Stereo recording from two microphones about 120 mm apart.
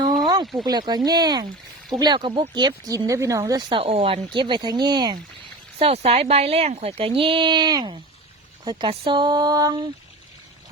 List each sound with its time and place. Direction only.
0.6 s speech: 35° right (ahead or behind); by 4.2 s 55° right (ahead or behind)
4.4 s speech: 40° right (ahead or behind)
5.8 s speech: 60° right (ahead or behind); by 9.8 s 30° right (ahead or behind)